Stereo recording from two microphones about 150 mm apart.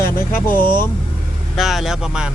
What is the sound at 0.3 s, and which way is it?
Speech, 15° left (ahead or behind).